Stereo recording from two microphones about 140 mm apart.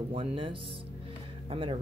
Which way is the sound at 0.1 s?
40° right (ahead or behind).